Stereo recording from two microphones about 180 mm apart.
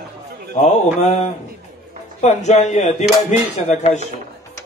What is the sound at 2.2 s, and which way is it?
Speech, 40° left (ahead or behind).